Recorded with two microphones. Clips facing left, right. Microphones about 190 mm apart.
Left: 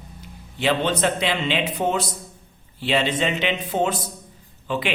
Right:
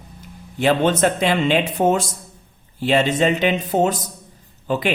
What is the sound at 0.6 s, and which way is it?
A man's voice, 45° right (ahead or behind).